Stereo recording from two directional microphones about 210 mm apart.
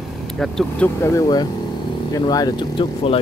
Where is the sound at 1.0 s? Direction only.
15° left (ahead or behind).